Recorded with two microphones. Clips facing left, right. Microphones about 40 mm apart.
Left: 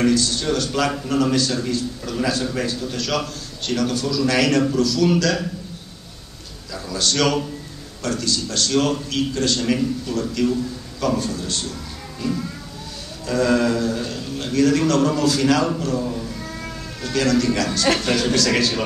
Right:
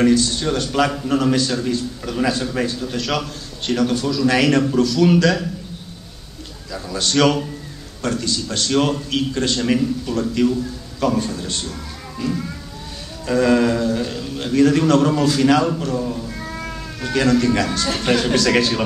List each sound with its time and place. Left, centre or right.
0.0 s a man's voice: centre
6.7 s a man's voice: centre
13.3 s a man's voice: centre
16.3 s cat: right
16.6 s a man's voice: centre